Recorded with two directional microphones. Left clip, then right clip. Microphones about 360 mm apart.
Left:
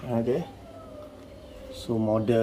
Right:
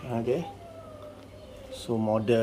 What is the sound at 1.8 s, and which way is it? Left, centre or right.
Speech, centre.